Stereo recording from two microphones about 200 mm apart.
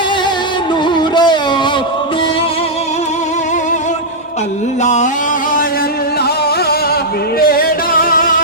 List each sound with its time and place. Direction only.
0.9 s music: 20° left (ahead or behind)
4.8 s music: 35° left (ahead or behind)
7.3 s music: 50° left (ahead or behind)